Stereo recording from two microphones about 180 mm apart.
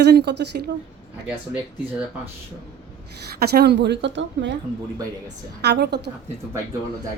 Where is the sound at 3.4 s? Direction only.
60° right (ahead or behind); by 4.5 s 85° right.